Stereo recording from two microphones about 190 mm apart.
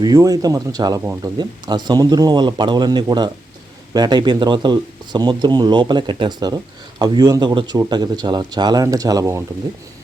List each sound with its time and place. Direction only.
0.0 s speech: 20° right (ahead or behind)